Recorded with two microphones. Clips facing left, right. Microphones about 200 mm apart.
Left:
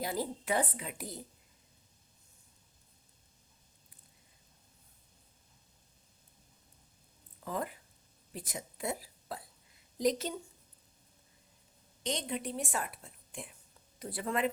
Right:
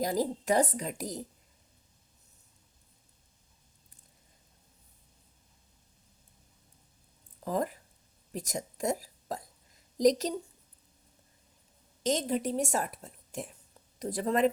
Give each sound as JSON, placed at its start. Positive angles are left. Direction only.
{"t": 0.0, "sound": "a woman's voice", "side_deg": -40}
{"t": 7.4, "sound": "speech", "side_deg": -40}
{"t": 8.3, "sound": "a sound", "side_deg": -40}
{"t": 12.0, "sound": "a woman's voice", "side_deg": -40}